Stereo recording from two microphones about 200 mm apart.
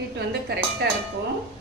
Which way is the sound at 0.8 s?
55° right (ahead or behind).